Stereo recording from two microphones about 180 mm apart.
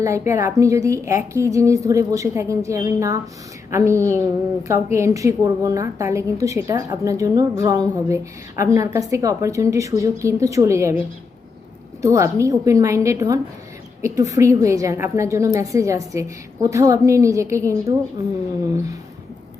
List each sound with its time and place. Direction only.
0.0 s a woman's voice: 15° right (ahead or behind)
12.0 s a woman's voice: 15° right (ahead or behind)